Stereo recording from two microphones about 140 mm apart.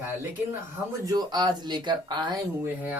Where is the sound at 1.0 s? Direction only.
30° right (ahead or behind).